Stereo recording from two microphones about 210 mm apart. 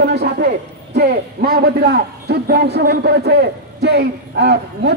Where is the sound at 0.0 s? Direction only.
50° right (ahead or behind).